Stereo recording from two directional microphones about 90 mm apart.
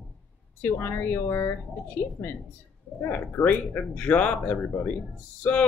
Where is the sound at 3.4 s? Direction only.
15° left (ahead or behind).